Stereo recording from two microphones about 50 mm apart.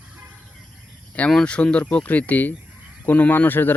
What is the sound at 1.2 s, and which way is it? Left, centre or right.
Speech, left.